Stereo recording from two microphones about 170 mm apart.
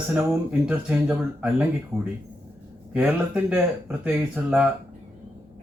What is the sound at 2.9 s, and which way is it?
Speech, 5° right (ahead or behind).